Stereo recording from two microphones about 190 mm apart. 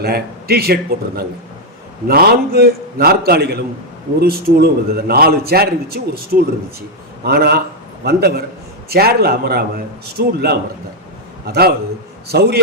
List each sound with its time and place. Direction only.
0.0 s a man's voice: 55° right (ahead or behind)